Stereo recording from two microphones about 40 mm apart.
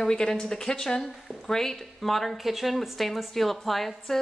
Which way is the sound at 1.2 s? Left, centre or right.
Centre.